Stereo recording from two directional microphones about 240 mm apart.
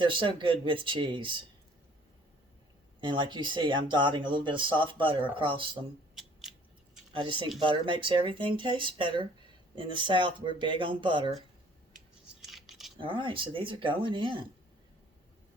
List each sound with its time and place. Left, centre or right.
0.0 s speech: centre
3.0 s speech: centre
7.1 s speech: centre
12.5 s a sound: centre
13.0 s speech: right